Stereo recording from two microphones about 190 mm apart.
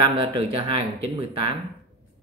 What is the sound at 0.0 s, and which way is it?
Speech, 25° right (ahead or behind).